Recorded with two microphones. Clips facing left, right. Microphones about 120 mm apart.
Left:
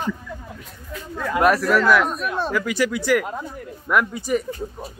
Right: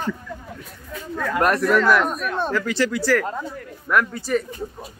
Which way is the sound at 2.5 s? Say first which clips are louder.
Even; 15° left (ahead or behind).